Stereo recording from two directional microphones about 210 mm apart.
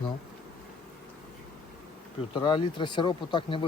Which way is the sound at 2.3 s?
20° left (ahead or behind).